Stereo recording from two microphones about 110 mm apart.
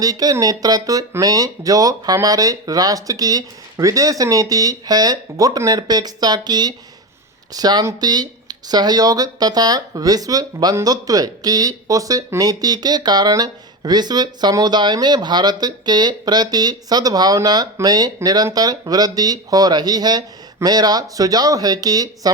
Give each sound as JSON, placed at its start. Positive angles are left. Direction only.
{"t": 0.0, "sound": "speech", "side_deg": -35}